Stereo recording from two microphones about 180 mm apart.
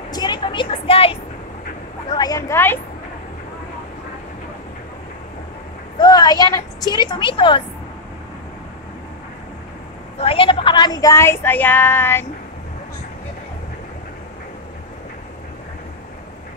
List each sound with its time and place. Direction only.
0.1 s a sound: 25° left (ahead or behind)
2.0 s speech: 20° left (ahead or behind)
5.9 s a woman's voice: 20° left (ahead or behind)
10.2 s speech: 30° left (ahead or behind); by 12.3 s 10° left (ahead or behind)